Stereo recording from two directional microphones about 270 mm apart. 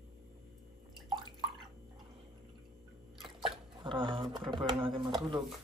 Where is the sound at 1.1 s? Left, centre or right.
Centre.